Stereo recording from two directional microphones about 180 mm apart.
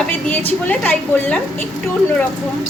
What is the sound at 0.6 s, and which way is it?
Speech, 10° left (ahead or behind).